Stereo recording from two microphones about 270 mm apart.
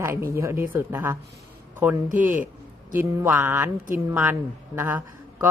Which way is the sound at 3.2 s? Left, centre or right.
Centre.